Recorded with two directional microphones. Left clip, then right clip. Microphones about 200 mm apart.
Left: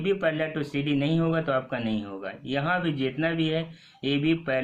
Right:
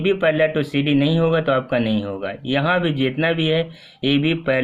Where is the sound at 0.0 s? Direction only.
45° right (ahead or behind).